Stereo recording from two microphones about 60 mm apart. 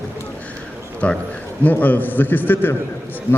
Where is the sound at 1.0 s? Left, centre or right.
Left.